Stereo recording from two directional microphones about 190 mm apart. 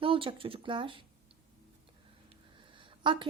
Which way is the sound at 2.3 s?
25° right (ahead or behind).